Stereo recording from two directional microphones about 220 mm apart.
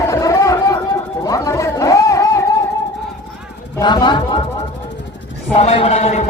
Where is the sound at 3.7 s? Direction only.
20° left (ahead or behind).